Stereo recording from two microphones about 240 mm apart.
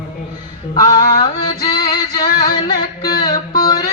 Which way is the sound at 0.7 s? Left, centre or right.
Centre.